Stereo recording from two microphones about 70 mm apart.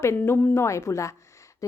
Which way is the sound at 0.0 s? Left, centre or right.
Left.